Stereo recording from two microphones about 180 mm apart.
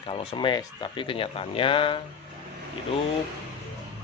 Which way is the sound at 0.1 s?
30° left (ahead or behind).